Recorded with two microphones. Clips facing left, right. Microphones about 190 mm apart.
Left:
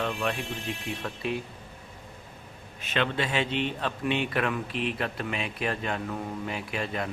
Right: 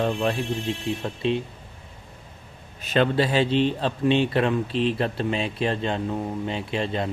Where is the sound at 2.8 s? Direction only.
40° right (ahead or behind).